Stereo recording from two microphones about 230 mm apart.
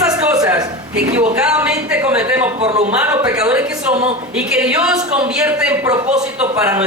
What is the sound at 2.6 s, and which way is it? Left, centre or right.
Speech, right.